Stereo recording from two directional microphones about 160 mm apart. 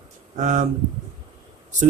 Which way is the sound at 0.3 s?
55° right (ahead or behind).